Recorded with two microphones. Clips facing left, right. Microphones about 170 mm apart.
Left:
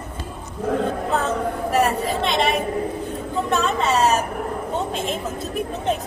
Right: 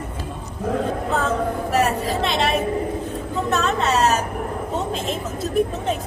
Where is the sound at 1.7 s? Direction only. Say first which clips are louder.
Left 1 dB; centre (ahead or behind).